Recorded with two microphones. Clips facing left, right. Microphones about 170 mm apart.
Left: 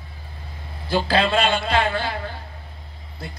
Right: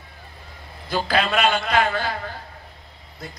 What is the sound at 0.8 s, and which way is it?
Speech, 30° left (ahead or behind).